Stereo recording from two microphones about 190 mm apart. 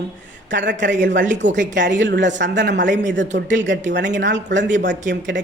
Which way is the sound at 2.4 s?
70° right (ahead or behind).